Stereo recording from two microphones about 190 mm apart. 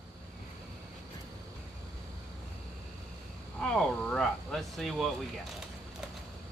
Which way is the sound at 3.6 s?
5° left (ahead or behind).